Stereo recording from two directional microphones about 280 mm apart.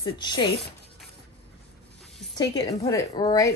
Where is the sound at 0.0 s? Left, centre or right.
Centre.